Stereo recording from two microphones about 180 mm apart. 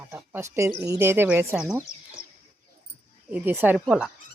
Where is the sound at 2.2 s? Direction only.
70° left (ahead or behind).